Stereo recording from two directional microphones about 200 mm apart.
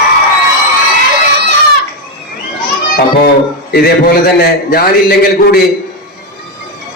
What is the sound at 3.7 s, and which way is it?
A man's voice, 50° left (ahead or behind).